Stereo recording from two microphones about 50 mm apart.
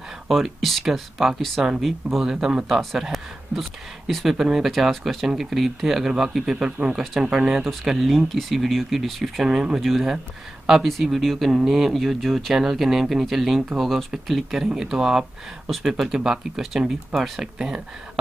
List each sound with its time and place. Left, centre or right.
0.3 s speech: centre